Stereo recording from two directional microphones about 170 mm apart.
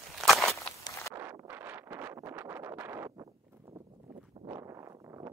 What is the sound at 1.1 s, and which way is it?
Wind noise, 15° right (ahead or behind).